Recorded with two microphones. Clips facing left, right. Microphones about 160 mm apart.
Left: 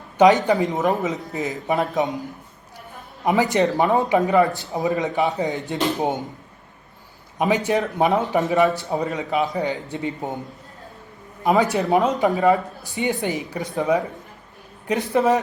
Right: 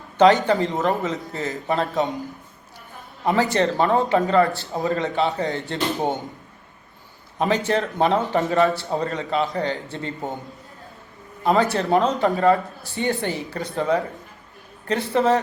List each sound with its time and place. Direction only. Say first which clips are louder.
0.2 s a man's voice: left 1 dB; 15° left (ahead or behind)
3.2 s a man's voice: left 1 dB; 15° left (ahead or behind)
7.3 s a man's voice: left 1 dB; 10° left (ahead or behind)
8.2 s a man's voice: left 1 dB; centre (ahead or behind)
8.4 s a man's voice: left 1 dB; 15° left (ahead or behind)
11.4 s a man's voice: left 1 dB; 15° left (ahead or behind)